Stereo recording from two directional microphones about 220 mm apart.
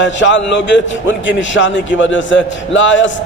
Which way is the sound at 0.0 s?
55° left (ahead or behind).